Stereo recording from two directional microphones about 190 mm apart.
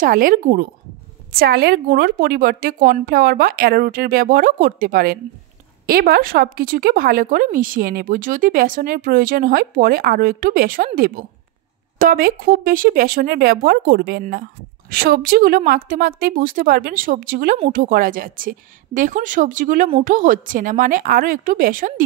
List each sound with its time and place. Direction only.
0.0 s a woman's voice: 45° right (ahead or behind)